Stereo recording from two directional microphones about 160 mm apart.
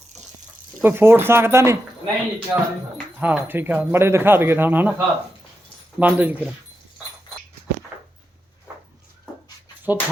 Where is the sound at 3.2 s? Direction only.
10° right (ahead or behind).